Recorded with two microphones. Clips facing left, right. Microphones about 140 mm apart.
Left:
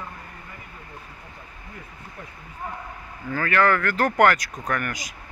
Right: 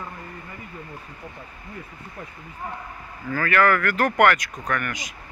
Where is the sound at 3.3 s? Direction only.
25° left (ahead or behind).